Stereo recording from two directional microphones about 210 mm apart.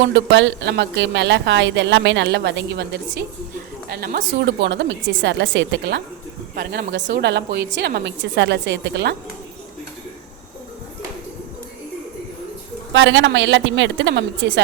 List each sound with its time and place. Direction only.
0.1 s a woman's voice: 60° right (ahead or behind)
12.9 s speech: 60° right (ahead or behind)